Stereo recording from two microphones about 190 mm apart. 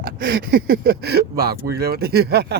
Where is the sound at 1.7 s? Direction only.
55° right (ahead or behind).